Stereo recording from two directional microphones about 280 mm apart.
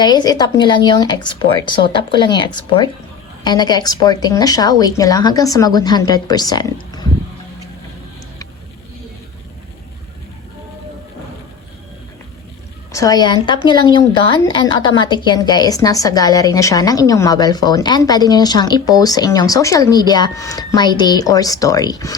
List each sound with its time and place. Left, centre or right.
0.0 s a woman's voice: centre
12.9 s a woman's voice: centre